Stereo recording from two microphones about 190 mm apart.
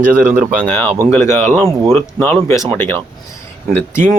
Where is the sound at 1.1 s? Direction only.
15° left (ahead or behind).